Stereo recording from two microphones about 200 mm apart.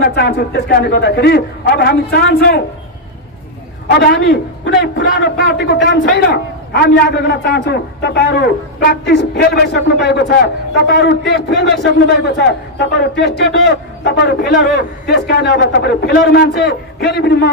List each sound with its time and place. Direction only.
0.0 s a man's voice: 55° left (ahead or behind)
3.9 s a man's voice: 60° left (ahead or behind)